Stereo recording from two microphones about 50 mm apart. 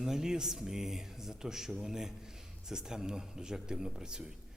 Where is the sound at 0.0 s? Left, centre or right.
Centre.